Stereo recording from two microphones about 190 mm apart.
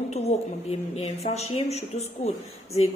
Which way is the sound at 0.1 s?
35° left (ahead or behind).